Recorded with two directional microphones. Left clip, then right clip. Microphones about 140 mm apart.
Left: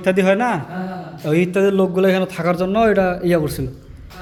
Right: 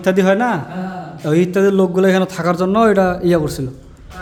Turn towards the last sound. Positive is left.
turn(degrees=-20)  # may be behind; listen again after turning